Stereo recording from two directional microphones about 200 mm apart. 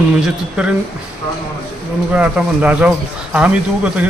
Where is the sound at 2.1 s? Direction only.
5° right (ahead or behind).